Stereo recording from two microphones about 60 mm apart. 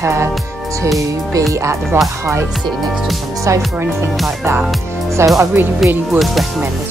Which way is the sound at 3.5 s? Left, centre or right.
Right.